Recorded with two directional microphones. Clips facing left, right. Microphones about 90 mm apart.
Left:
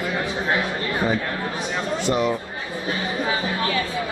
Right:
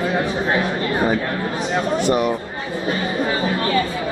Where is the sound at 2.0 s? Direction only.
55° right (ahead or behind).